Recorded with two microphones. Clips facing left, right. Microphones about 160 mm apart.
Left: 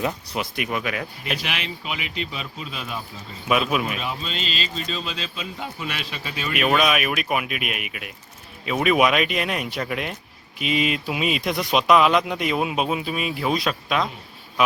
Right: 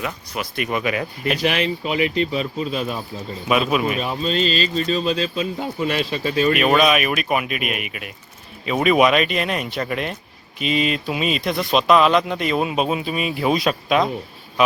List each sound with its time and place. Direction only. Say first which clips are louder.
0.4 s speech: right 2 dB; 20° left (ahead or behind)
0.7 s speech: right 7 dB; centre (ahead or behind)
1.4 s speech: right 10 dB; 40° right (ahead or behind)
3.5 s speech: right 3 dB; centre (ahead or behind)
3.9 s speech: right 8 dB; 45° right (ahead or behind)
6.6 s speech: left 1 dB; centre (ahead or behind)